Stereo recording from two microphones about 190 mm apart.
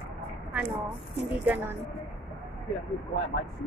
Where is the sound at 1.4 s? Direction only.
10° right (ahead or behind).